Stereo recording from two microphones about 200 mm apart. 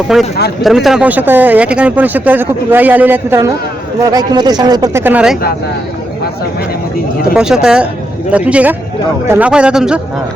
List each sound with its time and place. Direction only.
0.1 s speech: 5° right (ahead or behind)
7.3 s speech: 5° right (ahead or behind)